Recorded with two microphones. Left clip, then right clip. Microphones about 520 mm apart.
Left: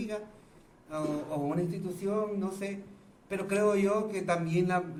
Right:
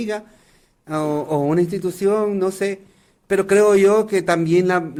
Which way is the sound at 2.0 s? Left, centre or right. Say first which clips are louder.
Right 14 dB; right.